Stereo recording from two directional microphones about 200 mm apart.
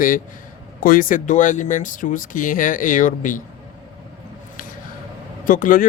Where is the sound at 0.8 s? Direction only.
45° left (ahead or behind).